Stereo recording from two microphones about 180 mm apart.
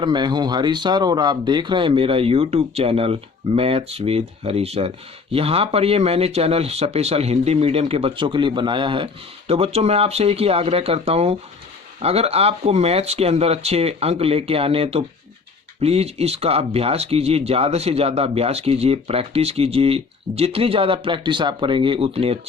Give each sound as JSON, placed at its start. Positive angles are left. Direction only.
{"t": 0.0, "sound": "speech", "side_deg": -25}